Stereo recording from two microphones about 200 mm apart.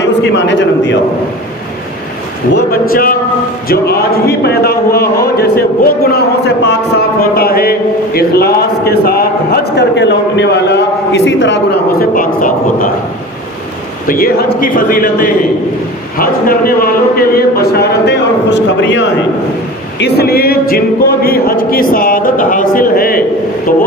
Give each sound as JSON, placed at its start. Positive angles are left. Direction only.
{"t": 0.0, "sound": "a man's voice", "side_deg": 65}
{"t": 2.9, "sound": "speech", "side_deg": 45}
{"t": 14.1, "sound": "speech", "side_deg": 45}